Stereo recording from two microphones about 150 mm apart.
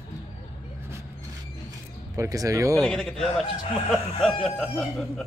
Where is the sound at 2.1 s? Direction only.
20° right (ahead or behind).